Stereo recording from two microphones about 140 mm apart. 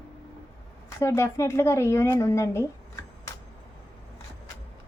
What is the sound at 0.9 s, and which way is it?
Speech, 20° left (ahead or behind).